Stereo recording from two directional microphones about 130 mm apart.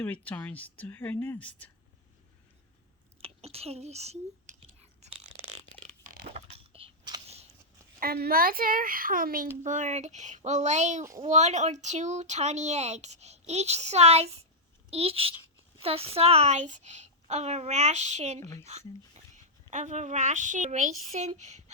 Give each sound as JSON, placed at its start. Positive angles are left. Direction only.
{"t": 0.0, "sound": "speech", "side_deg": 10}
{"t": 3.2, "sound": "whispering", "side_deg": -50}
{"t": 5.7, "sound": "a sound", "side_deg": 10}
{"t": 6.3, "sound": "a sound", "side_deg": -45}
{"t": 8.4, "sound": "speech", "side_deg": -90}
{"t": 9.6, "sound": "a woman's voice", "side_deg": -70}